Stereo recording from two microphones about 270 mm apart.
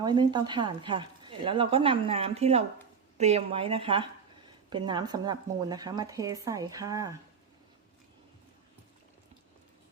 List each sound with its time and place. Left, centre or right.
0.0 s speech: centre